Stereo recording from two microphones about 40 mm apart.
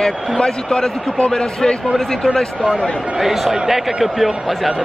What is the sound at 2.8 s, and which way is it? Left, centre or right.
Speech, centre.